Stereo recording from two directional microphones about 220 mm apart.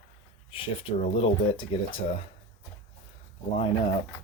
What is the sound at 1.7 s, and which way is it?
Speech, 25° left (ahead or behind).